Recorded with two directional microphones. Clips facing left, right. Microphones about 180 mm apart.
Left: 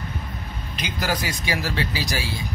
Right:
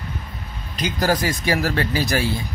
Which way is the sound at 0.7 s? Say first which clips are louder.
Right 6 dB; 45° right (ahead or behind).